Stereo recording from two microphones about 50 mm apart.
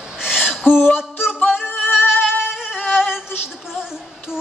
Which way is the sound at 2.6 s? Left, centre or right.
Centre.